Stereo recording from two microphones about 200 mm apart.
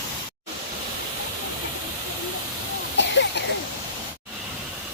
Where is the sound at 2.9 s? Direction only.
60° left (ahead or behind).